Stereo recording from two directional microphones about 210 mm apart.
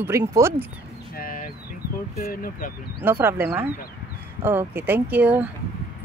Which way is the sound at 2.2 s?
40° left (ahead or behind).